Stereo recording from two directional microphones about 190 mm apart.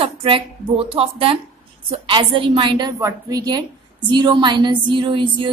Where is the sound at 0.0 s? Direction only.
30° right (ahead or behind).